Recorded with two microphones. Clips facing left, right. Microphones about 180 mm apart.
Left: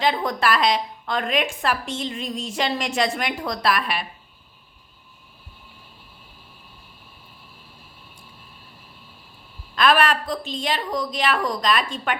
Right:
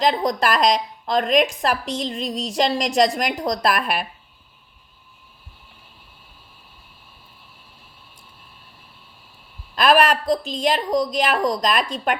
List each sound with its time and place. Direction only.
0.0 s a woman's voice: 35° right (ahead or behind)
9.8 s a woman's voice: 40° right (ahead or behind)